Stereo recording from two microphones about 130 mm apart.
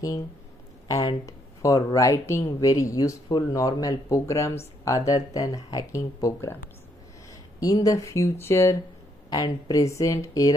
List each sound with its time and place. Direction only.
0.8 s speech: 30° left (ahead or behind)
7.6 s speech: 25° left (ahead or behind)